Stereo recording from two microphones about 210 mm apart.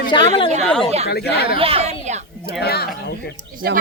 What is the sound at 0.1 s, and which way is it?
Speech, 25° left (ahead or behind).